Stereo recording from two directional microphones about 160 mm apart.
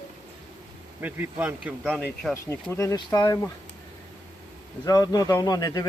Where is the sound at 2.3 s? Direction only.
15° left (ahead or behind).